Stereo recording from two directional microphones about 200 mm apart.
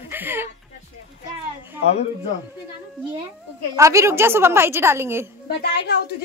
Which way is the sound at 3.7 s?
15° right (ahead or behind).